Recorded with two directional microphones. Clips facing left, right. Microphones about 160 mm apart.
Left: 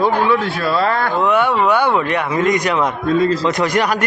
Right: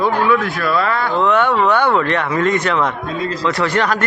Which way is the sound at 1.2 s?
10° left (ahead or behind).